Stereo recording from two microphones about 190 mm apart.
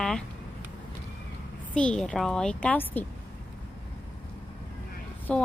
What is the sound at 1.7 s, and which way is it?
A woman's voice, 5° left (ahead or behind).